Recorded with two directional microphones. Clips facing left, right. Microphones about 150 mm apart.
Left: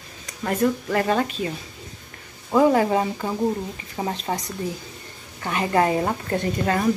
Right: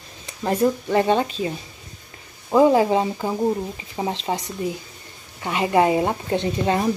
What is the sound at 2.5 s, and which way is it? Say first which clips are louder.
A woman's voice: right 2 dB; 25° right (ahead or behind).